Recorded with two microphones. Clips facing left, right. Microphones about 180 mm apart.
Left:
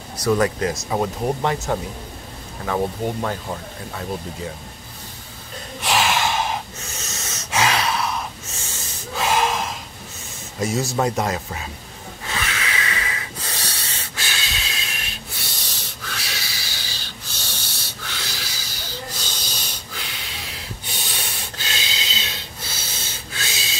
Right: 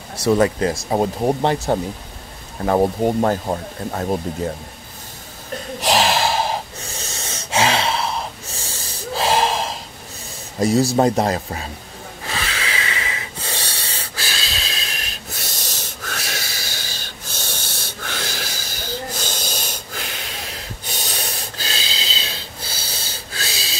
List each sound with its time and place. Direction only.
0.2 s speech: 30° right (ahead or behind); by 4.2 s 45° right (ahead or behind)
5.8 s snort: 35° right (ahead or behind)
10.6 s speech: 35° right (ahead or behind)
12.3 s snort: 30° right (ahead or behind)